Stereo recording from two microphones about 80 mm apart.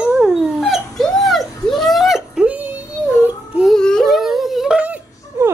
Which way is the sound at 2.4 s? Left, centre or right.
Right.